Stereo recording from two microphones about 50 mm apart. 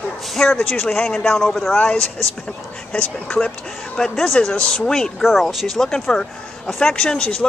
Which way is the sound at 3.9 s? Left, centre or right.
Centre.